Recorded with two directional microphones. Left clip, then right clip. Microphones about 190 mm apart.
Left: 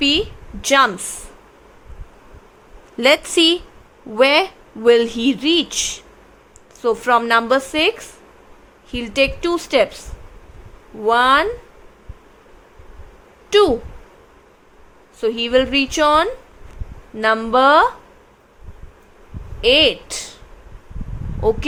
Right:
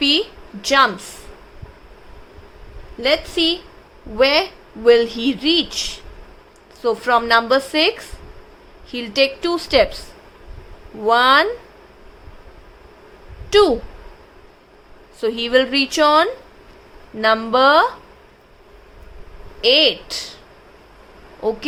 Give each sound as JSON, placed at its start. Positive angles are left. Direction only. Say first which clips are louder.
{"t": 0.0, "sound": "a sound", "louder": "even", "side_deg": 15}
{"t": 3.0, "sound": "a woman's voice", "louder": "left 4 dB", "side_deg": 30}
{"t": 11.0, "sound": "a woman's voice", "louder": "right 1 dB", "side_deg": 10}
{"t": 13.5, "sound": "speech", "louder": "even", "side_deg": 10}
{"t": 15.2, "sound": "a woman's voice", "louder": "even", "side_deg": 10}
{"t": 19.6, "sound": "a woman's voice", "louder": "left 1 dB", "side_deg": 15}
{"t": 21.4, "sound": "speech", "louder": "left 4 dB", "side_deg": 20}